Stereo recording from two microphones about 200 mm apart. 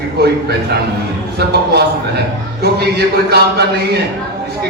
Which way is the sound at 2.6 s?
55° right (ahead or behind).